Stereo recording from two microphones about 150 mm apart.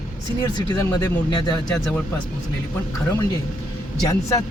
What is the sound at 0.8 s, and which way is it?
Speech, 25° left (ahead or behind).